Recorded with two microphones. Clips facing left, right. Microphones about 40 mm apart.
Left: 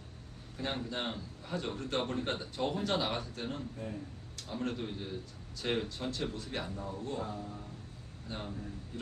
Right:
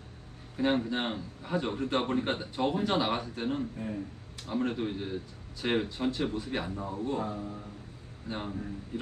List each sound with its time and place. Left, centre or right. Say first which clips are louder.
0.6 s a man's voice: right 8 dB; centre